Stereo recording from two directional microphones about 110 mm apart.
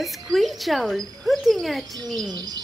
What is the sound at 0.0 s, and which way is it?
Speech, centre (ahead or behind).